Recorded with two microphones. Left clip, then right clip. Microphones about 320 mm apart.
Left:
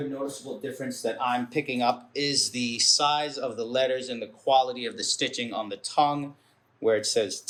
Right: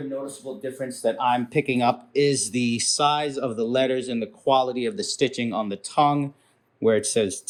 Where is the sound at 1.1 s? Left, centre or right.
Centre.